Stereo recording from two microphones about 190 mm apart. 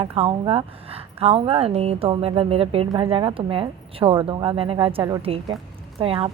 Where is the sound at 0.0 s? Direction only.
30° right (ahead or behind).